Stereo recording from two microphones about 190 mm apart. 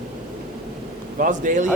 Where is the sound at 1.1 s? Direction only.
45° right (ahead or behind).